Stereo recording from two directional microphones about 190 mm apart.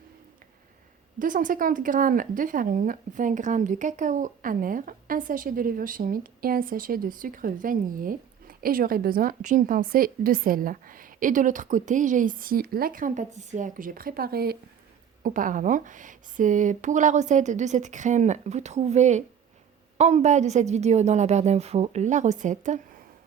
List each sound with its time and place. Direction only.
1.2 s speech: 45° right (ahead or behind)